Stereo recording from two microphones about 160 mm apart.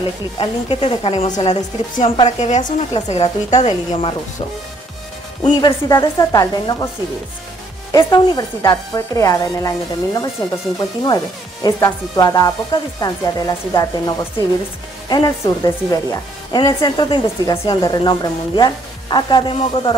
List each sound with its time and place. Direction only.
0.4 s a woman's voice: 35° left (ahead or behind)
1.2 s a woman's voice: 45° left (ahead or behind)
5.4 s speech: 25° left (ahead or behind)
7.9 s speech: 25° left (ahead or behind)